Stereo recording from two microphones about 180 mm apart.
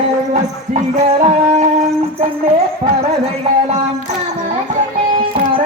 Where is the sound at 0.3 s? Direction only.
40° right (ahead or behind).